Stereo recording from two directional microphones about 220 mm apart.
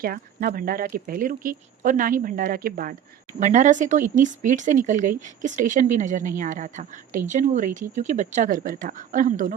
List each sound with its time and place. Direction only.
0.0 s speech: 40° right (ahead or behind)